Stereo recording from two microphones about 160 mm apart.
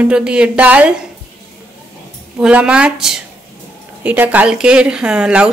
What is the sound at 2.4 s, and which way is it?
A woman's voice, 5° right (ahead or behind).